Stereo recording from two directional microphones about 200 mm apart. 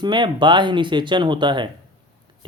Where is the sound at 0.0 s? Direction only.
20° right (ahead or behind).